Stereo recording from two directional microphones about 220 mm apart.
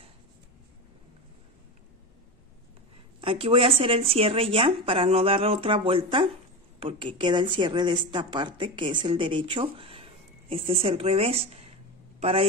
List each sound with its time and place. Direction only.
3.2 s a woman's voice: 25° right (ahead or behind)